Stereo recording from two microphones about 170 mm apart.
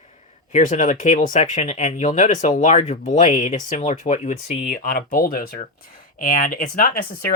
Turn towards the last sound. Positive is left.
turn(degrees=60)  # may be behind; listen again after turning